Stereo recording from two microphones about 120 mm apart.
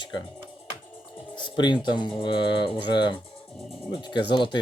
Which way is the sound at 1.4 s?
40° left (ahead or behind).